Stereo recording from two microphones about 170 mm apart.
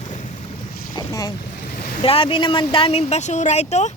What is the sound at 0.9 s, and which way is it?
Boat, 20° left (ahead or behind).